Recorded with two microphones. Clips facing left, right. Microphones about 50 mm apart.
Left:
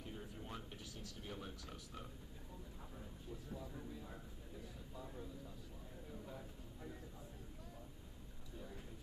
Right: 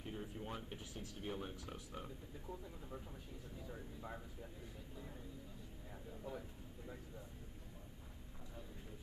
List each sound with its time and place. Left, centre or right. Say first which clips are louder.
0.1 s speech: right 5 dB; centre